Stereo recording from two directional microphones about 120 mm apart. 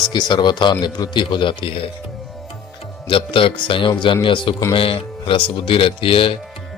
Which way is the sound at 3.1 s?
45° left (ahead or behind).